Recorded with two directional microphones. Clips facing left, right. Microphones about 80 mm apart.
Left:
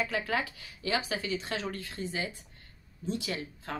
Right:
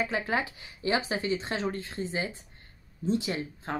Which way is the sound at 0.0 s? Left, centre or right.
Right.